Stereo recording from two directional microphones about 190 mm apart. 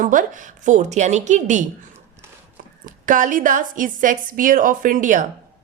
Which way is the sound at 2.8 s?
45° right (ahead or behind).